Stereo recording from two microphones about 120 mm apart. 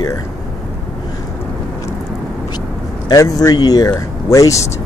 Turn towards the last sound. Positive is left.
turn(degrees=25)  # may be behind; listen again after turning